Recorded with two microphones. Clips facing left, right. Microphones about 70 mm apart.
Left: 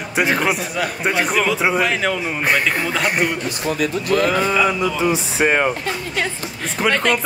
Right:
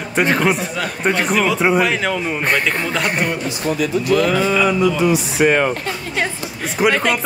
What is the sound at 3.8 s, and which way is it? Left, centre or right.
Speech, left.